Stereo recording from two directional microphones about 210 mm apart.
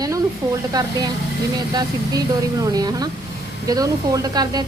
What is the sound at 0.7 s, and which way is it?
A woman's voice, 20° right (ahead or behind).